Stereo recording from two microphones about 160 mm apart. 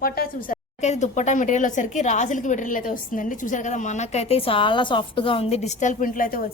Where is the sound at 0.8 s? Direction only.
45° left (ahead or behind).